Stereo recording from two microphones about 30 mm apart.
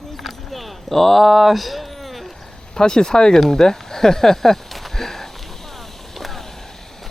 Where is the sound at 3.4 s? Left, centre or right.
Centre.